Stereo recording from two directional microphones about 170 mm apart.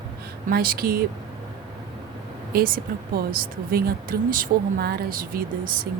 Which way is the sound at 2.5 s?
60° right (ahead or behind).